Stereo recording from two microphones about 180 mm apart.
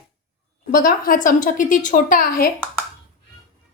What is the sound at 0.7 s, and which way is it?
A woman's voice, 50° left (ahead or behind).